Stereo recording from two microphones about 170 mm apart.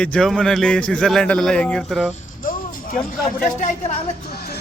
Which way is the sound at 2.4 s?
55° left (ahead or behind).